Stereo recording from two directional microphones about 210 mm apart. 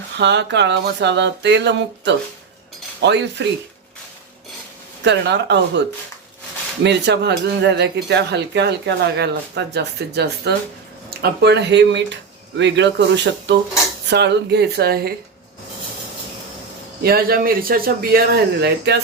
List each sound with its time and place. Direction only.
0.2 s speech: 55° right (ahead or behind)
5.0 s speech: 55° right (ahead or behind)
6.8 s speech: 55° right (ahead or behind)
17.0 s speech: 45° right (ahead or behind)